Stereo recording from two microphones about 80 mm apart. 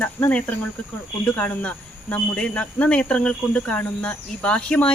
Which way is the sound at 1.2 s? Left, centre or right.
Centre.